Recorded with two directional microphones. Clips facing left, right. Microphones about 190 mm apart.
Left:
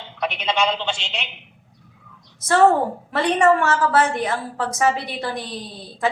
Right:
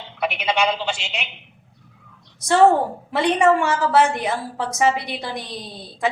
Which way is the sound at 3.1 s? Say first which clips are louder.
Even; 15° right (ahead or behind).